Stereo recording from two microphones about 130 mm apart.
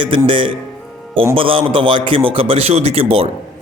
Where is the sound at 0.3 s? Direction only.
40° right (ahead or behind).